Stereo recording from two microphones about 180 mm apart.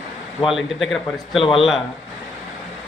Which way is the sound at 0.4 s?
Centre (ahead or behind).